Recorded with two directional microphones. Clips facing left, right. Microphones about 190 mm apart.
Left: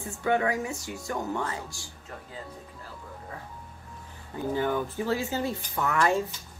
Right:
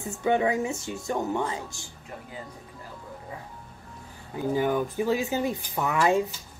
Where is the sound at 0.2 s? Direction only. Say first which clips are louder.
Right 2 dB; 20° right (ahead or behind).